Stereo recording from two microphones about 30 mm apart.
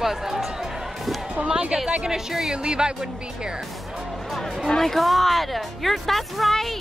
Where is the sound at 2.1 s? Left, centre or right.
Centre.